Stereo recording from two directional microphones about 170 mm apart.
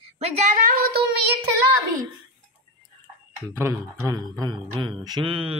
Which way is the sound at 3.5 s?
15° right (ahead or behind).